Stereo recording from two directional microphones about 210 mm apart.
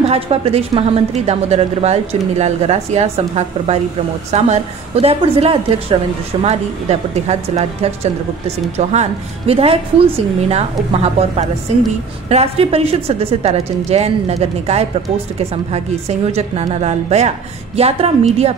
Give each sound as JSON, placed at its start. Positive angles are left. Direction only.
{"t": 0.1, "sound": "a woman's voice", "side_deg": -30}